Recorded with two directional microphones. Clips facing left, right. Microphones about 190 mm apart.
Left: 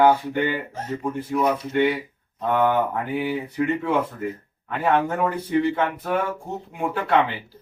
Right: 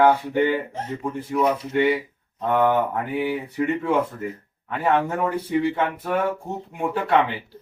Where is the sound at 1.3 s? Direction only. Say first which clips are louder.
Right 1 dB; 10° right (ahead or behind).